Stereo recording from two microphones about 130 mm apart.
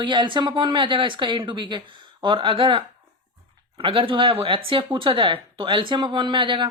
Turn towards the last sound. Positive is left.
turn(degrees=-40)  # may be behind; listen again after turning